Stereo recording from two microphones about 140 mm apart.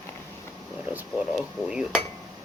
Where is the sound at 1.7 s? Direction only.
5° right (ahead or behind).